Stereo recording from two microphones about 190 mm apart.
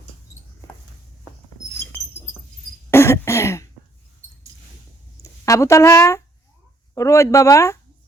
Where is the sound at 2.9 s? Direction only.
15° left (ahead or behind).